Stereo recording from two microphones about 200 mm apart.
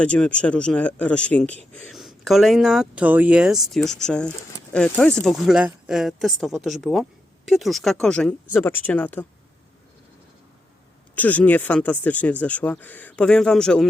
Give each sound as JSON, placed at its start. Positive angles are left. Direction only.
{"t": 0.0, "sound": "a man's voice", "side_deg": 5}
{"t": 11.1, "sound": "speech", "side_deg": 10}